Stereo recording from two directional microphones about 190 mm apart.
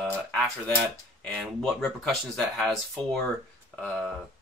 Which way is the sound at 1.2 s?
5° left (ahead or behind).